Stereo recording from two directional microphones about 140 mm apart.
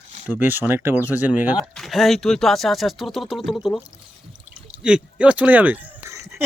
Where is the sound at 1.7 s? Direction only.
Centre (ahead or behind).